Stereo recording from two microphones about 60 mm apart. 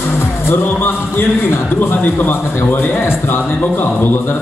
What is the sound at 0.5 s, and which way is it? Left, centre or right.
A man's voice, left.